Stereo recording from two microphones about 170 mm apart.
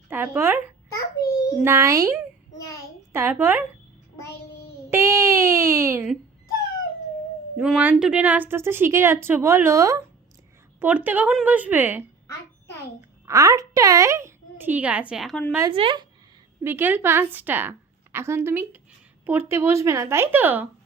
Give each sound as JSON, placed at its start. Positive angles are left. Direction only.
{"t": 0.1, "sound": "a woman's voice", "side_deg": -15}
{"t": 1.3, "sound": "a sound", "side_deg": 20}
{"t": 1.6, "sound": "a woman's voice", "side_deg": -15}
{"t": 2.6, "sound": "a sound", "side_deg": 20}
{"t": 3.1, "sound": "a woman's voice", "side_deg": -15}
{"t": 4.9, "sound": "a sound", "side_deg": -15}
{"t": 7.5, "sound": "a woman's voice", "side_deg": -5}
{"t": 13.2, "sound": "a woman's voice", "side_deg": -20}
{"t": 15.7, "sound": "speech", "side_deg": -30}
{"t": 16.6, "sound": "a woman's voice", "side_deg": -10}